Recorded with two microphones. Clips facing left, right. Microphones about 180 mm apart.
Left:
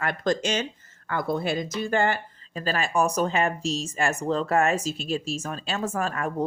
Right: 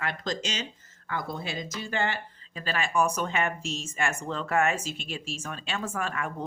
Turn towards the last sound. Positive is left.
turn(degrees=40)  # may be behind; listen again after turning